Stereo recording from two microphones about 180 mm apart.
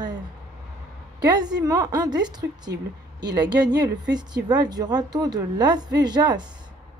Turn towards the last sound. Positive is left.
turn(degrees=-25)  # may be behind; listen again after turning